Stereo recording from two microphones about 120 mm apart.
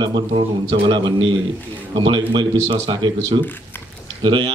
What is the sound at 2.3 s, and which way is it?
A man's voice, 40° right (ahead or behind).